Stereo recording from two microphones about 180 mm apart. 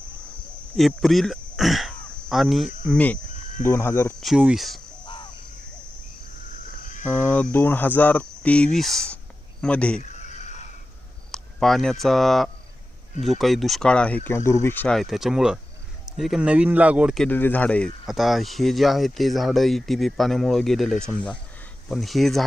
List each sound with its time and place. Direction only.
0.8 s speech: centre (ahead or behind)
4.2 s speech: 5° right (ahead or behind)
5.0 s crow: 25° left (ahead or behind)
7.0 s speech: 10° left (ahead or behind)
10.0 s a sound: 40° left (ahead or behind)
11.3 s speech: centre (ahead or behind)
17.2 s speech: 10° left (ahead or behind)